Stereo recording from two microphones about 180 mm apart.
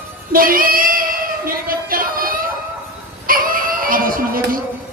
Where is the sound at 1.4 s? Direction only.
50° right (ahead or behind).